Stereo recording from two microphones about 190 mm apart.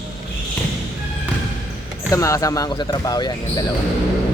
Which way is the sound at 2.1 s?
15° left (ahead or behind).